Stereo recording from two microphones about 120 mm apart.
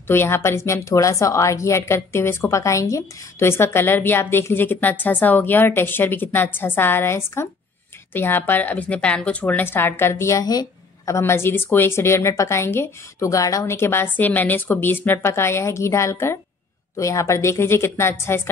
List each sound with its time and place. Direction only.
0.1 s a woman's voice: 20° left (ahead or behind)